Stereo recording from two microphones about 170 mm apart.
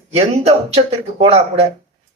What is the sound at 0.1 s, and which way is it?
Speech, 40° right (ahead or behind).